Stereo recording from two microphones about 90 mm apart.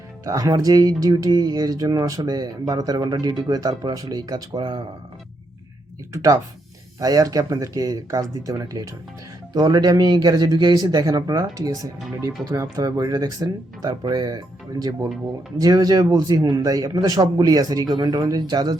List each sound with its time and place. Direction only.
0.3 s speech: 40° right (ahead or behind); by 4.9 s 60° right (ahead or behind)
7.0 s speech: 40° right (ahead or behind)